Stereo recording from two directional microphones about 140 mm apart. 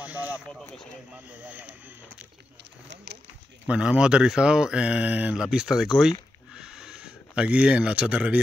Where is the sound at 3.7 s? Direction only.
5° right (ahead or behind).